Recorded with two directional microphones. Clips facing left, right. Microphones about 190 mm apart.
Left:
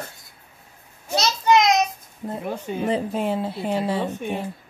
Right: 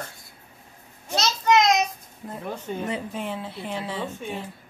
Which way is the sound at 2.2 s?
40° left (ahead or behind).